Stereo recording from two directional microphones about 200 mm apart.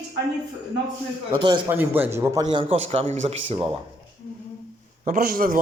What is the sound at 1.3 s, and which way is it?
Speech, 20° right (ahead or behind).